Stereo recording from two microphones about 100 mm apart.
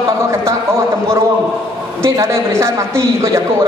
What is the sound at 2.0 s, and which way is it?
A man's voice, 30° right (ahead or behind).